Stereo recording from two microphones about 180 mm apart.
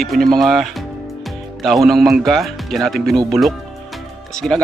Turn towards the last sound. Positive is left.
turn(degrees=0)  # may be behind; listen again after turning